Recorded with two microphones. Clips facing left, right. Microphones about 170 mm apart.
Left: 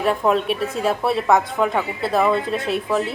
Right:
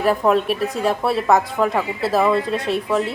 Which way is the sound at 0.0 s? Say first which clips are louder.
Right 2 dB; centre (ahead or behind).